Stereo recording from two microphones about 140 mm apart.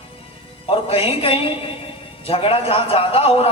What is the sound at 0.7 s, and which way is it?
A man's voice, 40° left (ahead or behind).